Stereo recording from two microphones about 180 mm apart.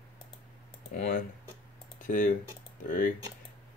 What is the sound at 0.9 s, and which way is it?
Speech, 50° left (ahead or behind).